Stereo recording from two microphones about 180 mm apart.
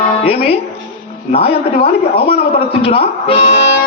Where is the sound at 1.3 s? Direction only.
35° left (ahead or behind).